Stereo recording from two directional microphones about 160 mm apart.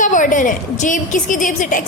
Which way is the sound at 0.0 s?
55° left (ahead or behind).